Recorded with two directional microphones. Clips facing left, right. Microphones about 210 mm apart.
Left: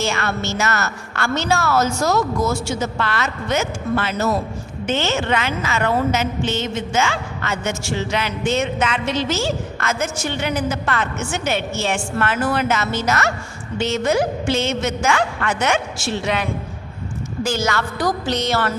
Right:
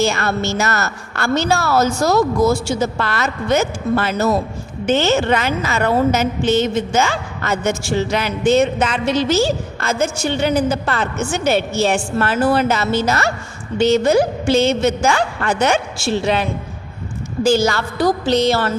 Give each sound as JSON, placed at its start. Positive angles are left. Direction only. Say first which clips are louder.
{"t": 0.0, "sound": "a woman's voice", "louder": "right 4 dB", "side_deg": -35}